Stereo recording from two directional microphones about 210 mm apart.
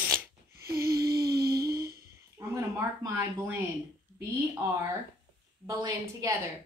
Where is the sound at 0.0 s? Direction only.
5° right (ahead or behind).